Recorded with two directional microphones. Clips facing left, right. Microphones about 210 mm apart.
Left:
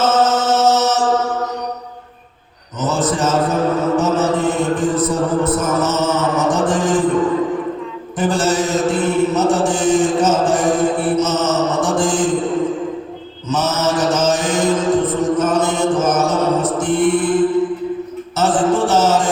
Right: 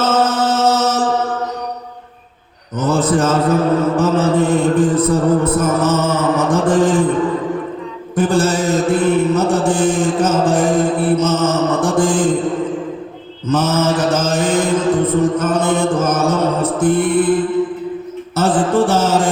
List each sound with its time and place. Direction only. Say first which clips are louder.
0.1 s chant: even; 55° right (ahead or behind)
2.8 s mantra: right 3 dB; 55° right (ahead or behind)
8.1 s mantra: right 2 dB; 55° right (ahead or behind)
13.5 s mantra: right 3 dB; 55° right (ahead or behind)
18.3 s music: right 1 dB; 55° right (ahead or behind)